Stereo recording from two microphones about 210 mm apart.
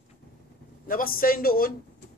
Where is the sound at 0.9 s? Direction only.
45° left (ahead or behind).